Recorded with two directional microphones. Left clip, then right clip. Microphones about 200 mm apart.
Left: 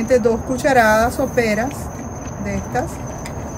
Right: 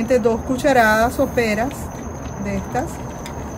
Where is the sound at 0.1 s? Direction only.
20° right (ahead or behind).